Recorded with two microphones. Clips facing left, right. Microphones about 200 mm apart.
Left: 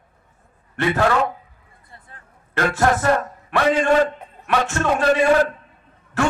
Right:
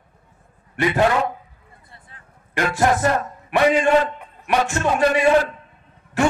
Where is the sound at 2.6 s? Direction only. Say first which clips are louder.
Left 1 dB; 15° right (ahead or behind).